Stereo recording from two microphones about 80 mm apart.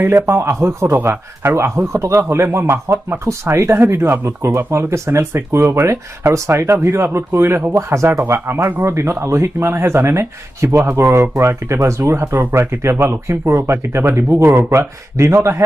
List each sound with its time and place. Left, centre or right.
0.3 s speech: right
12.4 s speech: right